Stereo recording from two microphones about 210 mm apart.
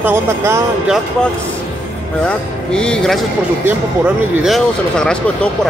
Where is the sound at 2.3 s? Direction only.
5° left (ahead or behind).